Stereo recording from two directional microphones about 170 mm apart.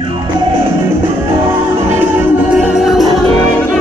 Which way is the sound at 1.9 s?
10° right (ahead or behind).